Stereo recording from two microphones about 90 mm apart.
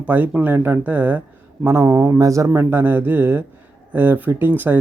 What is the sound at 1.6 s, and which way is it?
Speech, 30° right (ahead or behind).